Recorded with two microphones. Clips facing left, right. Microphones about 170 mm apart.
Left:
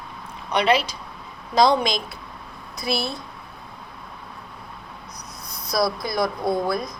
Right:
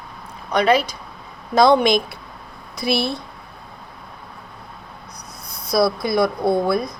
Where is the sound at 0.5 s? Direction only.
45° right (ahead or behind).